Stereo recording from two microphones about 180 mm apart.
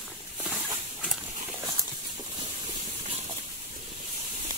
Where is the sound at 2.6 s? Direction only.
30° right (ahead or behind).